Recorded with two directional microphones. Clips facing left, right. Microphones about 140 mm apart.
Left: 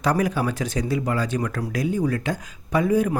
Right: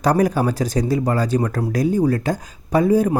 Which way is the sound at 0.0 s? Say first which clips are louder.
Right 5 dB; 40° right (ahead or behind).